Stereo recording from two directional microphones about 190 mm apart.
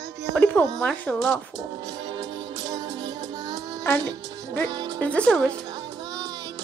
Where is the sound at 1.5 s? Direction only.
20° right (ahead or behind).